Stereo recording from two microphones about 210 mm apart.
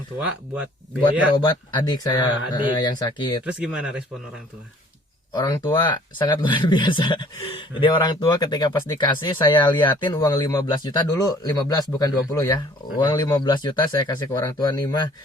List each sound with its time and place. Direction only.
0.2 s speech: 5° right (ahead or behind)
1.4 s speech: 20° left (ahead or behind)
3.4 s speech: 5° right (ahead or behind)
5.3 s speech: 20° left (ahead or behind)